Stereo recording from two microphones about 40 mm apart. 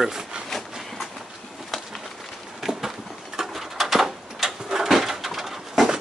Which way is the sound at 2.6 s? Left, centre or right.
Centre.